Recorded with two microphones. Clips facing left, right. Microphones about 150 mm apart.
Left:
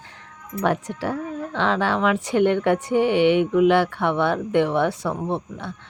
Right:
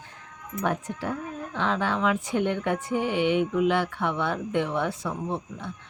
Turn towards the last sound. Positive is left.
turn(degrees=70)  # may be behind; listen again after turning